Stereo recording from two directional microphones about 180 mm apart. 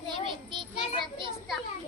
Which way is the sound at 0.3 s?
25° right (ahead or behind).